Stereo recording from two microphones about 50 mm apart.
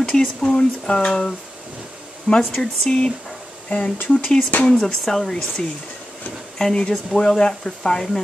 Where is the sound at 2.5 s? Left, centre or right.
Centre.